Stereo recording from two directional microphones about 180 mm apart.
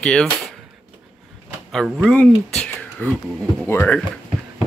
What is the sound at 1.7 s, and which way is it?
Speech, centre (ahead or behind).